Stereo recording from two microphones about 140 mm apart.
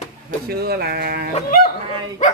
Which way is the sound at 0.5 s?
90° right.